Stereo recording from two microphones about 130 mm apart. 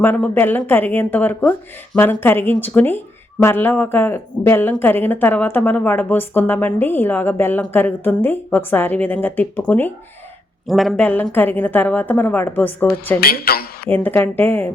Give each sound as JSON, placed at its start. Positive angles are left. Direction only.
{"t": 0.0, "sound": "a woman's voice", "side_deg": 15}
{"t": 10.7, "sound": "speech", "side_deg": 0}
{"t": 11.0, "sound": "a woman's voice", "side_deg": 15}